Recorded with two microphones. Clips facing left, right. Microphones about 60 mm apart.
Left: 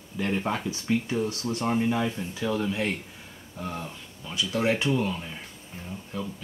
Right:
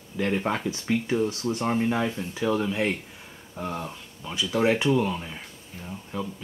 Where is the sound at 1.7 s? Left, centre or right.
Centre.